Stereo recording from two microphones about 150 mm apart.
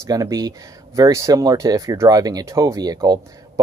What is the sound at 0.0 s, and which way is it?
Speech, 25° right (ahead or behind).